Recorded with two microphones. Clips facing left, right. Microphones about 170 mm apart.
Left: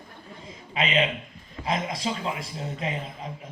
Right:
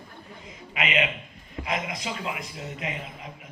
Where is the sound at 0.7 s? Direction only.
30° left (ahead or behind).